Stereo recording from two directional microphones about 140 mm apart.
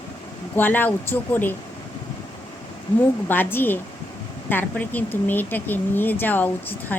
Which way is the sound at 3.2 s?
15° left (ahead or behind).